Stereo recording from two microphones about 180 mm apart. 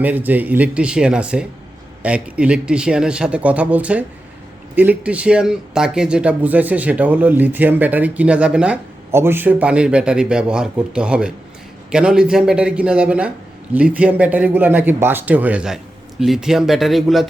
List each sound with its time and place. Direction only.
0.0 s a man's voice: 10° right (ahead or behind)